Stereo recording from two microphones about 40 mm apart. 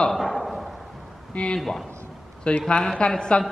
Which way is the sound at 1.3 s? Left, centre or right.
Left.